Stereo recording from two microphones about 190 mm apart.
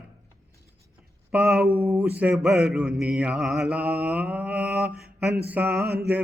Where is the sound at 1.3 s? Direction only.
5° right (ahead or behind).